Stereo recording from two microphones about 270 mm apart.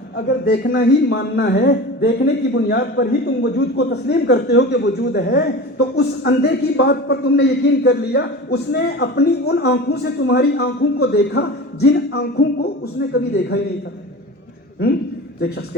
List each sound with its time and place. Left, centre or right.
0.4 s speech: left